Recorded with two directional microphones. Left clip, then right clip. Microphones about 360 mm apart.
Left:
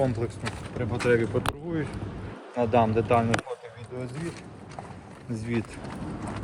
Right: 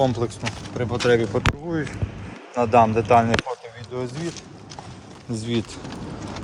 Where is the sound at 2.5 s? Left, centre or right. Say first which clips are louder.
Right 6 dB; centre.